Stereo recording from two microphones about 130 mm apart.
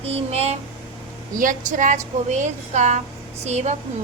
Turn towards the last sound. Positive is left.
turn(degrees=-60)  # may be behind; listen again after turning